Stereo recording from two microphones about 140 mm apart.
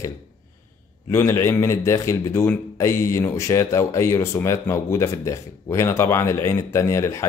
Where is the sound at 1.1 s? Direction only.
20° left (ahead or behind).